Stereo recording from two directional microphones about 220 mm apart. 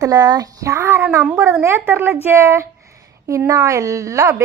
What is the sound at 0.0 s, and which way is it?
A woman's voice, 15° right (ahead or behind).